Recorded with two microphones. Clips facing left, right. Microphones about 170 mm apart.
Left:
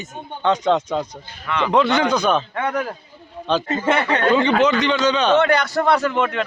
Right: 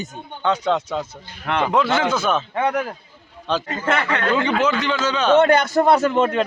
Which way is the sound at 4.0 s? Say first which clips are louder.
Left 3 dB; 30° left (ahead or behind).